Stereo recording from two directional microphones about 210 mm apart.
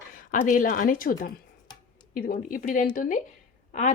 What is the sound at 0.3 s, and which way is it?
A woman's voice, 40° left (ahead or behind).